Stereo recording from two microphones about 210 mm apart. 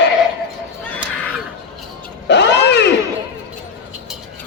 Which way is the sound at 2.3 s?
55° left (ahead or behind).